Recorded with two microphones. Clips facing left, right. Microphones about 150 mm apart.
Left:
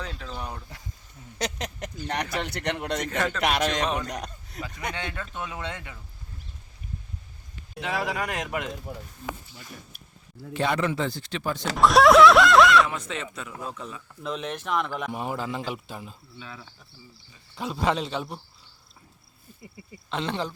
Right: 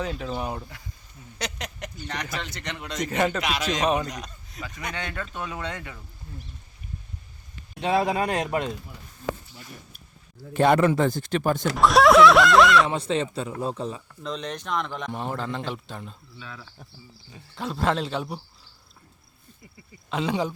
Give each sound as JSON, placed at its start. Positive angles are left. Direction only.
{"t": 0.0, "sound": "speech", "side_deg": -10}
{"t": 1.4, "sound": "speech", "side_deg": 40}
{"t": 2.1, "sound": "a man's voice", "side_deg": 60}
{"t": 3.1, "sound": "speech", "side_deg": -10}
{"t": 3.4, "sound": "a man's voice", "side_deg": 60}
{"t": 4.6, "sound": "speech", "side_deg": 25}
{"t": 7.8, "sound": "speech", "side_deg": -30}
{"t": 10.5, "sound": "speech", "side_deg": -50}
{"t": 11.8, "sound": "a man's voice", "side_deg": 0}
{"t": 12.9, "sound": "speech", "side_deg": -30}
{"t": 14.2, "sound": "a man's voice", "side_deg": 5}
{"t": 20.1, "sound": "speech", "side_deg": -5}